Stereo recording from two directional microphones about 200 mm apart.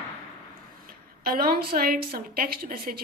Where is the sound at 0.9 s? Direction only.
45° right (ahead or behind).